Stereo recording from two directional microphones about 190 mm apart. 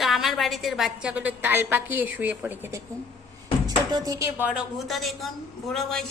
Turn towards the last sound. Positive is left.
turn(degrees=0)  # may be behind; listen again after turning